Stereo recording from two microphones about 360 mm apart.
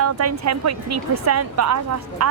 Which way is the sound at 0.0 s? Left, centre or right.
Right.